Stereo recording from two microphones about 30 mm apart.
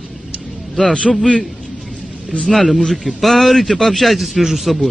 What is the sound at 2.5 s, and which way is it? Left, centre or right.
A man's voice, centre.